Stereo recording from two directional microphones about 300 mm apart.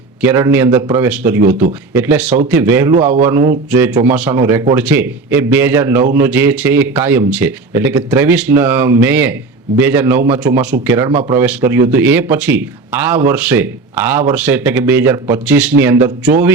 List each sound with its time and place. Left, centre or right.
0.3 s speech: centre
2.9 s a man's voice: right
3.2 s speech: centre
11.1 s a man's voice: centre
11.3 s speech: centre